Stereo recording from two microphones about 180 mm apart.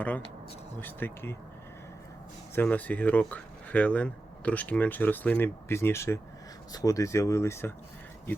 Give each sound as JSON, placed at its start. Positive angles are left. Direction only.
{"t": 0.8, "sound": "speech", "side_deg": 10}
{"t": 2.6, "sound": "speech", "side_deg": 10}